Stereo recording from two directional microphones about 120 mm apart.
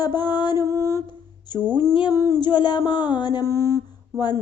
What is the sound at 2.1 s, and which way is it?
Mantra, 30° left (ahead or behind).